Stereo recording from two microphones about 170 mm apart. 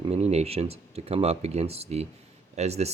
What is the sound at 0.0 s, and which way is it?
Speech, 40° right (ahead or behind).